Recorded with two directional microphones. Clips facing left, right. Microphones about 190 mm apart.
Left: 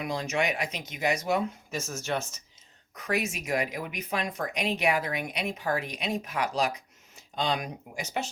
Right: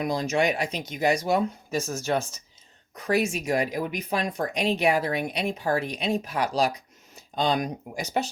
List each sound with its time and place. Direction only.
0.0 s speech: 35° right (ahead or behind)